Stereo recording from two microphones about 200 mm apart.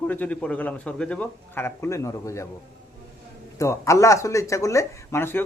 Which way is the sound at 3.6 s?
15° left (ahead or behind).